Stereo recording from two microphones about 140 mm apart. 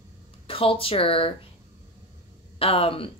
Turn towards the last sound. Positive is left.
turn(degrees=40)  # may be behind; listen again after turning